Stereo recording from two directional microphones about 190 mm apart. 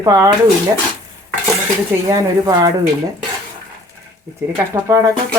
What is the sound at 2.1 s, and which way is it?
Speech, 20° right (ahead or behind).